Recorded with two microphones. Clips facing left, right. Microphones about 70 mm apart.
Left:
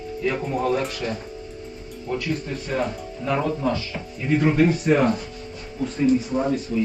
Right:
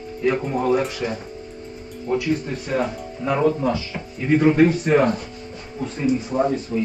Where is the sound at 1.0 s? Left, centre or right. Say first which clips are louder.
Right 2 dB; right.